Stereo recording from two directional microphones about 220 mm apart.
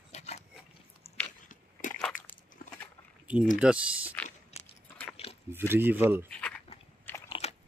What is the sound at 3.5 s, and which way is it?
Speech, 5° right (ahead or behind).